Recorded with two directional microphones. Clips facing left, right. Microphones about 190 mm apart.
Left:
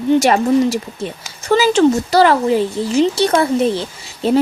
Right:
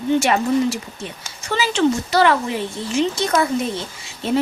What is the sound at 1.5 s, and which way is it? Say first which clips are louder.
Speech: left 7 dB; 40° left (ahead or behind).